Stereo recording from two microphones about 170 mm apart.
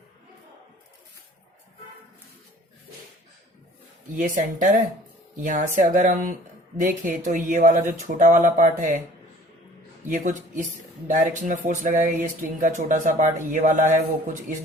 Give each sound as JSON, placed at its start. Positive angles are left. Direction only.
{"t": 4.1, "sound": "speech", "side_deg": -50}
{"t": 10.1, "sound": "speech", "side_deg": -50}